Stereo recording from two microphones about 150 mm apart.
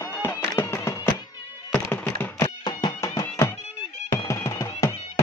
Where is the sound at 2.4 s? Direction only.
25° left (ahead or behind).